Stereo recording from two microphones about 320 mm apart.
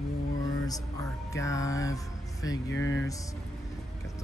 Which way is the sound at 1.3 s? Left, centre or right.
Centre.